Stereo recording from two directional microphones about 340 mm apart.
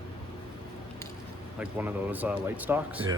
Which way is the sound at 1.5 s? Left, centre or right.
Centre.